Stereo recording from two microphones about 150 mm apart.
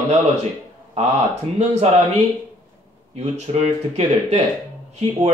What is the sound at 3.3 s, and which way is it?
A man's voice, 45° right (ahead or behind).